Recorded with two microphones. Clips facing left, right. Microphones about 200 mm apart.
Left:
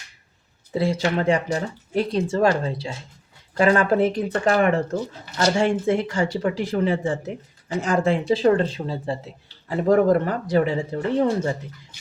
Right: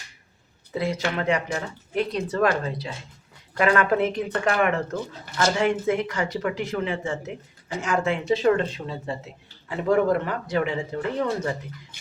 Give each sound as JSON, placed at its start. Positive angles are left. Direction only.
{"t": 0.7, "sound": "speech", "side_deg": 30}